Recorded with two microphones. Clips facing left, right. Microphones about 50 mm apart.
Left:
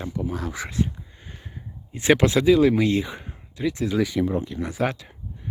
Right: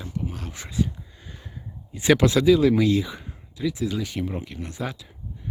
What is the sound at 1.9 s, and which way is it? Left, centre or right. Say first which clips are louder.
Speech: even; left.